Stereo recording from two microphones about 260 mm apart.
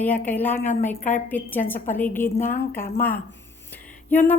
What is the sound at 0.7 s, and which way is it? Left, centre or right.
Speech, left.